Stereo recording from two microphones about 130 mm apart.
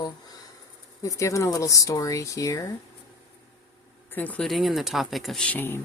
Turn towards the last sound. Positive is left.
turn(degrees=15)  # may be behind; listen again after turning